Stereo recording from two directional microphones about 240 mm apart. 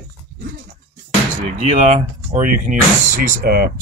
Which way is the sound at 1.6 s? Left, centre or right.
Right.